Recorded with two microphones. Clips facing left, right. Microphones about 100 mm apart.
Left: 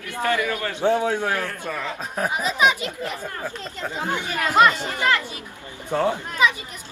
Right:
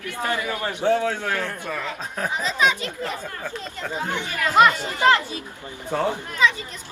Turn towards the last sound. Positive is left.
turn(degrees=15)  # may be behind; listen again after turning